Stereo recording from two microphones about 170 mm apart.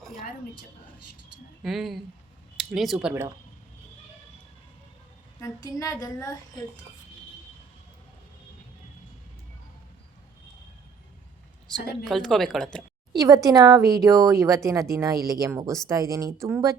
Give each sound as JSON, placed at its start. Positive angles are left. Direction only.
{"t": 1.6, "sound": "a woman's voice", "side_deg": 0}
{"t": 5.4, "sound": "a sound", "side_deg": 20}
{"t": 11.7, "sound": "a woman's voice", "side_deg": 5}
{"t": 13.1, "sound": "speech", "side_deg": -20}